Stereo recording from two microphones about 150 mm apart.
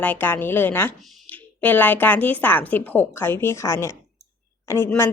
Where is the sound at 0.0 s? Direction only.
15° left (ahead or behind).